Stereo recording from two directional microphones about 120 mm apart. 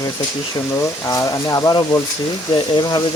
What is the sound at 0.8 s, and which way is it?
Speech, 25° left (ahead or behind).